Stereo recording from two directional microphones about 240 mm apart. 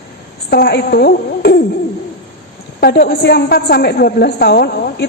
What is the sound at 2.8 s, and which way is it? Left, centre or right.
A woman's voice, left.